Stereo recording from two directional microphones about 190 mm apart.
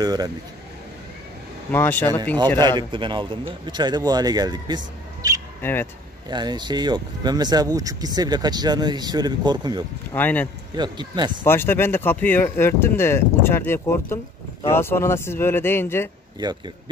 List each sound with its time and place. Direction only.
0.0 s speech: 20° right (ahead or behind)
1.7 s speech: 10° left (ahead or behind)
2.9 s speech: 25° right (ahead or behind)
5.6 s speech: 10° left (ahead or behind)
6.2 s speech: 20° right (ahead or behind)
10.1 s speech: 10° left (ahead or behind)
10.8 s speech: 25° right (ahead or behind)
11.4 s speech: 10° left (ahead or behind)
16.3 s speech: 20° right (ahead or behind)